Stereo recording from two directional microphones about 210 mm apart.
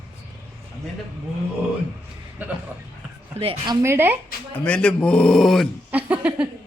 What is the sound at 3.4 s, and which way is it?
Speech, 25° right (ahead or behind).